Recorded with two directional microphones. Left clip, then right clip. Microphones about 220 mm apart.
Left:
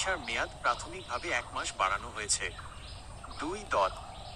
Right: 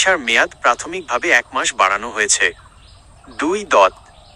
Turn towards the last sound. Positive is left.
turn(degrees=-45)  # may be behind; listen again after turning